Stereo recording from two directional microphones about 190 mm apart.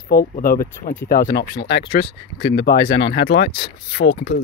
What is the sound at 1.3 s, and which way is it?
Speech, 60° left (ahead or behind).